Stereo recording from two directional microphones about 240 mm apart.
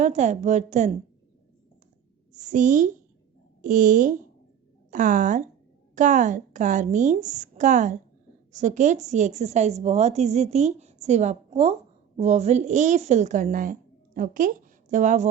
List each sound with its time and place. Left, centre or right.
0.0 s a woman's voice: right
2.3 s a woman's voice: right